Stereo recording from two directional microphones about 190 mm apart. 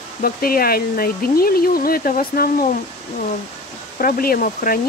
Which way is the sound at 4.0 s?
50° left (ahead or behind).